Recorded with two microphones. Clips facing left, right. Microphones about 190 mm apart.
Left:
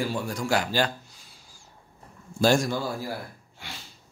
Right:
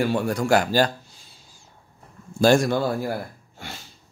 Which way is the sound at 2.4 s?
60° right (ahead or behind).